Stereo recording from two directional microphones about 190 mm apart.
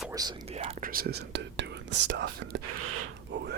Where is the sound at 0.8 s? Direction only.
50° right (ahead or behind).